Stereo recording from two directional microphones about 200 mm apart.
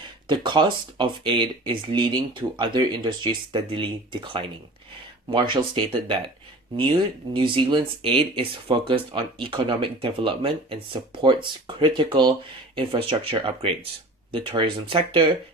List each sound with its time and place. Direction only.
0.3 s speech: 25° right (ahead or behind)
7.3 s speech: 25° right (ahead or behind)